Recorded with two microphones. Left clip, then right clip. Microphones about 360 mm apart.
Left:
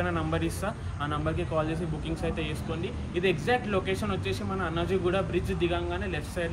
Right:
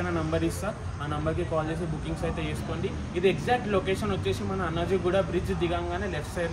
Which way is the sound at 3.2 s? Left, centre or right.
Centre.